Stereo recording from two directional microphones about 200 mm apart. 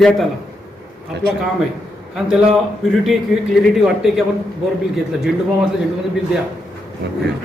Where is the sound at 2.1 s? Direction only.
5° right (ahead or behind).